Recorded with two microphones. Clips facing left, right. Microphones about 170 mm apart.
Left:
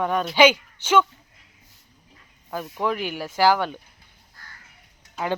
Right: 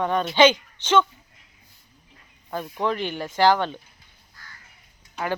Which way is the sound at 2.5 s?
5° left (ahead or behind).